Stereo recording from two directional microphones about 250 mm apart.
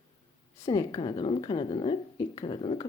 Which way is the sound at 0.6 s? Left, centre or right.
Centre.